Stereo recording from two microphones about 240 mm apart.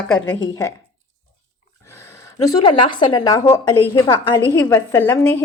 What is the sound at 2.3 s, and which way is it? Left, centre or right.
A woman's voice, centre.